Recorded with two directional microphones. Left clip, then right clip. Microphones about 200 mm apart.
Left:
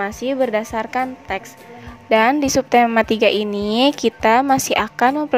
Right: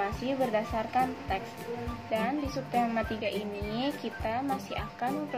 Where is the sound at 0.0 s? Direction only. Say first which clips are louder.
Left 11 dB; 55° left (ahead or behind).